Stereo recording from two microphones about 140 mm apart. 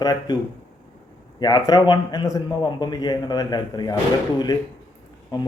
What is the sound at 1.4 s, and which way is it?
A man's voice, 30° left (ahead or behind).